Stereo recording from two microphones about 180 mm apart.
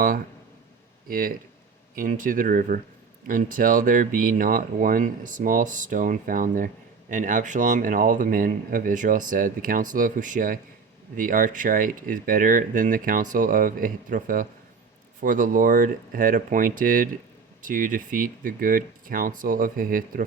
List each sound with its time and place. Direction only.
1.0 s speech: 50° right (ahead or behind)